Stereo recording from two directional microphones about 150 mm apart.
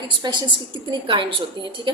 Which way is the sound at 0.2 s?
30° right (ahead or behind).